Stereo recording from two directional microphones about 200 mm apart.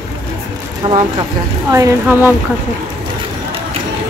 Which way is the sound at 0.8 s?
25° right (ahead or behind).